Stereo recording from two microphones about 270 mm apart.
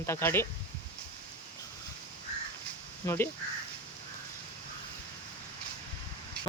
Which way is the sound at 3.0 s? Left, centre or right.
Centre.